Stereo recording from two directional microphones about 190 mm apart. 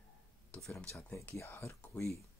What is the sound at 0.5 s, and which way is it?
Speech, 5° left (ahead or behind).